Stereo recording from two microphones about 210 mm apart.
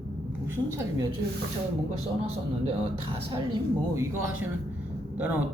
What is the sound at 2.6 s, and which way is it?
Speech, 25° right (ahead or behind).